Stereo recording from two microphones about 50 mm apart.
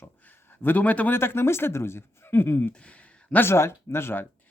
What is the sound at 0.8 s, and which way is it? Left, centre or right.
Speech, left.